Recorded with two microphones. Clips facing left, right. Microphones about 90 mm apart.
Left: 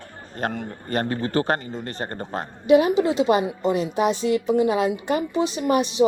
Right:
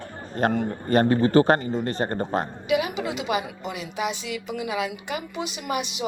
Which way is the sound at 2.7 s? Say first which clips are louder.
Left 10 dB; 35° left (ahead or behind).